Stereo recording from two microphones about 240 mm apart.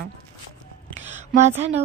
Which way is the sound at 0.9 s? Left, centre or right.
Right.